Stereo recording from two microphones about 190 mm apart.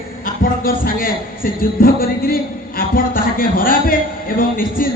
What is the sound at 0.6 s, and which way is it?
A man's voice, 50° left (ahead or behind).